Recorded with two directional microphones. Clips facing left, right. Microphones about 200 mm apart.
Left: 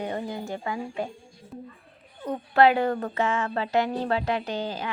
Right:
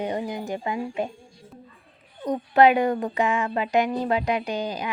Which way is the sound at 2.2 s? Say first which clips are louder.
Right 2 dB; 15° right (ahead or behind).